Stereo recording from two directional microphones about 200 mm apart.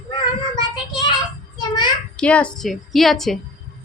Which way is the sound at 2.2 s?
5° left (ahead or behind).